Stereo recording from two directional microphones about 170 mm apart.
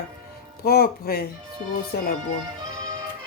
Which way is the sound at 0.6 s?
60° left (ahead or behind).